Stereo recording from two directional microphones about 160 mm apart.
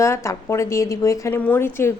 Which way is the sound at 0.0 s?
15° left (ahead or behind).